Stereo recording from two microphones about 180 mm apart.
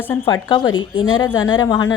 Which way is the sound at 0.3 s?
20° left (ahead or behind).